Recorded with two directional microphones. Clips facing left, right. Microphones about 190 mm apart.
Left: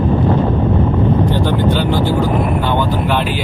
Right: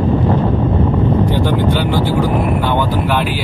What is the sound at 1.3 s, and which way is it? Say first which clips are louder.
Vehicle: even; 10° right (ahead or behind).